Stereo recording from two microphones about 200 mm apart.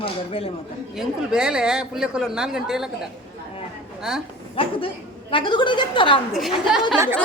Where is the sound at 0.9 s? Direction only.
5° right (ahead or behind).